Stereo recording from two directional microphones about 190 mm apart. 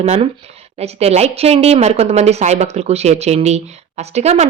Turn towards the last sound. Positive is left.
turn(degrees=-35)  # may be behind; listen again after turning